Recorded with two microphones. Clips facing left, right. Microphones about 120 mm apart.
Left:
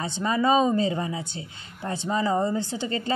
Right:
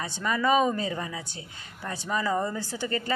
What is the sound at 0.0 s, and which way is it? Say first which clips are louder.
Speech: left 3 dB; 25° left (ahead or behind).